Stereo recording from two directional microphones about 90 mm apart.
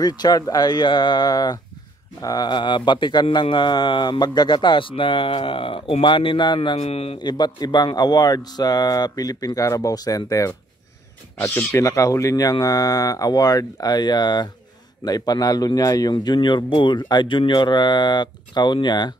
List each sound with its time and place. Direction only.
0.0 s speech: 50° left (ahead or behind); by 7.2 s 80° left
7.2 s speech: 55° left (ahead or behind)
11.4 s speech: 25° left (ahead or behind)
11.8 s speech: 35° left (ahead or behind); by 19.1 s 55° left (ahead or behind)